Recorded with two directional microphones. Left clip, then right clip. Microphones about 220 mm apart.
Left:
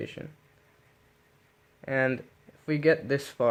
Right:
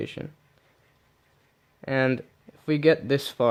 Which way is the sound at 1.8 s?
40° right (ahead or behind).